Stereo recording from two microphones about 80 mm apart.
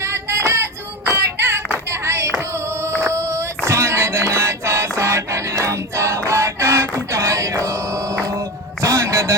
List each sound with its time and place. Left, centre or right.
0.0 s child singing: right
1.9 s a sound: right
8.2 s music: right